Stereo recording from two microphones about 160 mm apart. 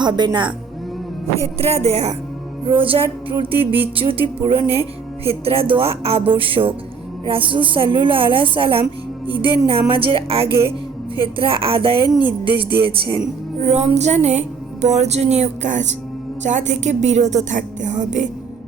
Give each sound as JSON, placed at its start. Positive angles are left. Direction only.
{"t": 0.0, "sound": "a woman's voice", "side_deg": -25}
{"t": 1.5, "sound": "speech", "side_deg": -40}
{"t": 3.5, "sound": "music", "side_deg": -10}
{"t": 5.2, "sound": "speech", "side_deg": -35}
{"t": 13.7, "sound": "music", "side_deg": -45}